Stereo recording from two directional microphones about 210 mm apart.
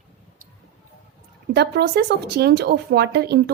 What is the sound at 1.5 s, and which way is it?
A woman's voice, 50° right (ahead or behind).